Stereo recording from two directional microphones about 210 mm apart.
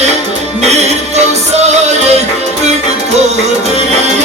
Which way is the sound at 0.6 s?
30° right (ahead or behind).